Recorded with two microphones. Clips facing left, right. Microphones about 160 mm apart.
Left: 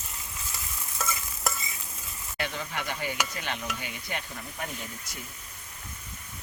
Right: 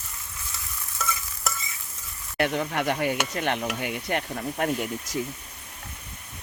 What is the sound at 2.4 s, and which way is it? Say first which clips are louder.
Stir: right 9 dB; 60° right (ahead or behind).